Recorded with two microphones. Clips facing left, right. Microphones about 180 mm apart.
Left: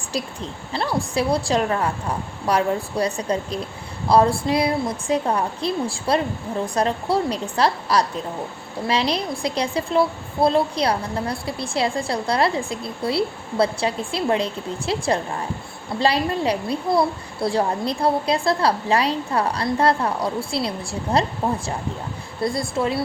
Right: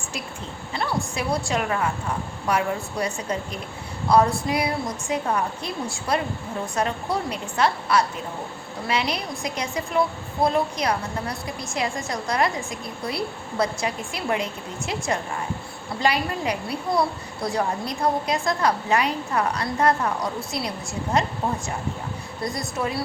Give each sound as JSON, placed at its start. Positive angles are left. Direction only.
{"t": 0.7, "sound": "a woman's voice", "side_deg": 30}
{"t": 22.4, "sound": "a woman's voice", "side_deg": 25}